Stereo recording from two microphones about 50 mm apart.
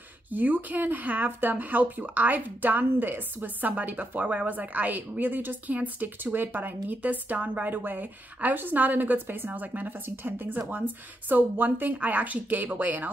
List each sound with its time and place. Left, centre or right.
0.3 s a woman's voice: right